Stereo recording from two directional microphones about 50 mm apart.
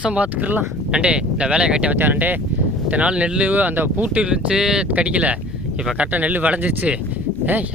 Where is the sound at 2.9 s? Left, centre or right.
Right.